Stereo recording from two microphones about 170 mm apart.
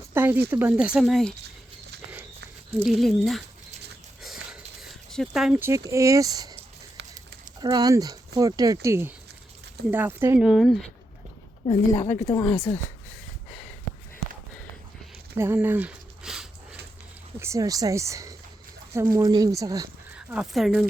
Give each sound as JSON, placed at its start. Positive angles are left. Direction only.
{"t": 0.1, "sound": "a sound", "side_deg": -10}
{"t": 0.5, "sound": "speech", "side_deg": -10}
{"t": 2.8, "sound": "speech", "side_deg": 0}
{"t": 4.2, "sound": "a sound", "side_deg": 0}
{"t": 5.6, "sound": "speech", "side_deg": -15}
{"t": 7.0, "sound": "a sound", "side_deg": -80}
{"t": 7.6, "sound": "speech", "side_deg": -20}
{"t": 10.4, "sound": "speech", "side_deg": 0}
{"t": 11.6, "sound": "a woman's voice", "side_deg": 30}
{"t": 15.4, "sound": "a sound", "side_deg": -15}
{"t": 17.4, "sound": "speech", "side_deg": -20}
{"t": 20.1, "sound": "speech", "side_deg": -5}